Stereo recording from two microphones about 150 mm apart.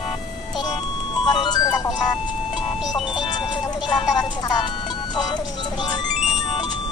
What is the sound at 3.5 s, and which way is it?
Music, 30° left (ahead or behind).